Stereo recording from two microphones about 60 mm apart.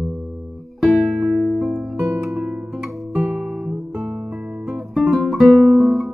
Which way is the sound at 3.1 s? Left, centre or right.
Right.